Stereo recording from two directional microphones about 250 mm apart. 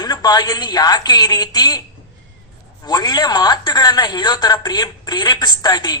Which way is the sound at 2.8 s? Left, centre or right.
Centre.